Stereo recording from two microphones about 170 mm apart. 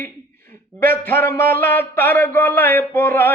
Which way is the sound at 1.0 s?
10° left (ahead or behind).